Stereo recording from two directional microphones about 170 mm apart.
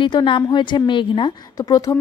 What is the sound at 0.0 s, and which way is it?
A woman's voice, 30° left (ahead or behind).